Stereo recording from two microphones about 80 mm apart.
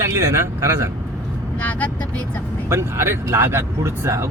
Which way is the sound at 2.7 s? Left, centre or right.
Right.